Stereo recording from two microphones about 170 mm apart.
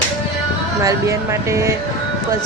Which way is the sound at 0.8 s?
15° right (ahead or behind).